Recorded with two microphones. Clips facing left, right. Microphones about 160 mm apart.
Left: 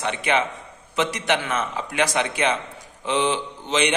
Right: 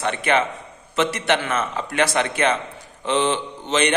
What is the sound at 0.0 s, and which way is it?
A man's voice, 15° left (ahead or behind).